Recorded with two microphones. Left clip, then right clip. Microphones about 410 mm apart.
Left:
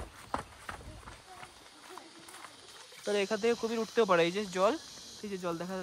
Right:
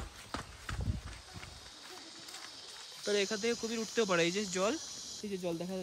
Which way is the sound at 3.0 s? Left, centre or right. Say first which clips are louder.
Left 3 dB; centre.